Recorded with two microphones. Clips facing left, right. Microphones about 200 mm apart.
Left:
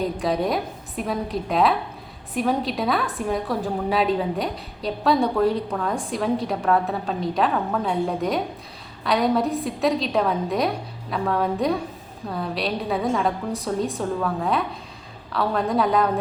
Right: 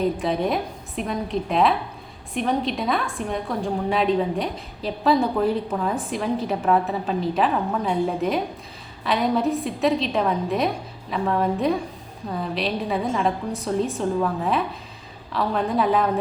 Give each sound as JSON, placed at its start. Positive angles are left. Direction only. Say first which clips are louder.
{"t": 0.2, "sound": "a woman's voice", "louder": "even", "side_deg": 0}